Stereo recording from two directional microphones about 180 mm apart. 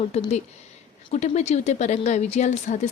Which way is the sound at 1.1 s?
40° left (ahead or behind).